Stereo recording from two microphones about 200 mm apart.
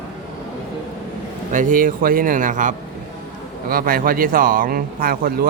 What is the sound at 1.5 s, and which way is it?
A man's voice, 40° right (ahead or behind).